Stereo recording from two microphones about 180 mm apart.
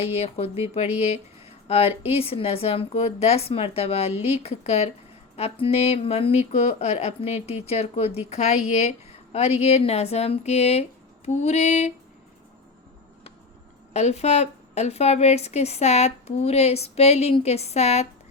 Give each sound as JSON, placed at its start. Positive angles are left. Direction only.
{"t": 0.0, "sound": "a woman's voice", "side_deg": 35}
{"t": 13.9, "sound": "a woman's voice", "side_deg": 40}